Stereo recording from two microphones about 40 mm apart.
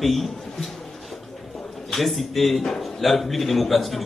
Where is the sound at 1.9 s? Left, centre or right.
Centre.